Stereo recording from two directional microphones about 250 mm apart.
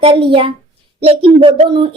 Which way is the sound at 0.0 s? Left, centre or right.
Centre.